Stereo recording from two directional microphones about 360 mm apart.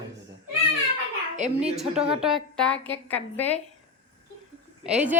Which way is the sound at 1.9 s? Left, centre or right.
Centre.